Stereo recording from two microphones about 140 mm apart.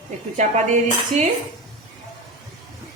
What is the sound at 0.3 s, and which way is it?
Speech, 60° right (ahead or behind).